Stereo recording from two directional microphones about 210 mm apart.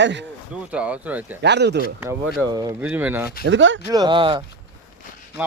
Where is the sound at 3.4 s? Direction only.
60° right (ahead or behind).